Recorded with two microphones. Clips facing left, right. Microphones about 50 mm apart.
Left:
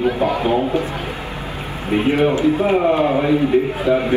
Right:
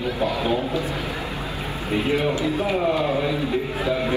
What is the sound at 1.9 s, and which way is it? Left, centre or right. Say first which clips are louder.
A man's voice: left 6 dB; left.